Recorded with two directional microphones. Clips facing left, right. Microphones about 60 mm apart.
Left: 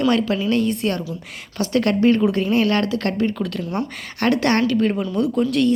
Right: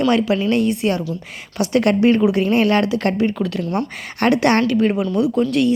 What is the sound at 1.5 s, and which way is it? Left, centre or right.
Speech, centre.